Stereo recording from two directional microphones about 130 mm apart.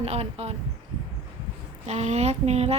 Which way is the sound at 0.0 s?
50° right (ahead or behind).